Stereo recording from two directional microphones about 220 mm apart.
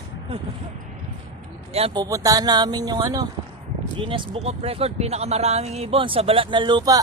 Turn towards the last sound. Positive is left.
turn(degrees=-20)  # may be behind; listen again after turning